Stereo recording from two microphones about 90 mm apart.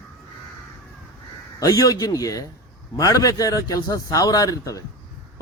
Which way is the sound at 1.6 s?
40° left (ahead or behind).